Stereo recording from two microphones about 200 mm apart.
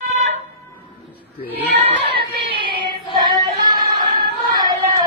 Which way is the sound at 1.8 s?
25° right (ahead or behind).